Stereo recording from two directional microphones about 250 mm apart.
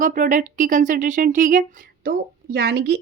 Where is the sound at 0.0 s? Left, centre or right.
Right.